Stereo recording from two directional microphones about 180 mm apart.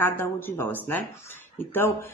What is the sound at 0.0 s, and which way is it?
Speech, 10° left (ahead or behind).